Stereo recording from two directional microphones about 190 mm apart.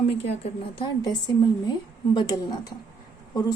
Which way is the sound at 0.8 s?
20° left (ahead or behind).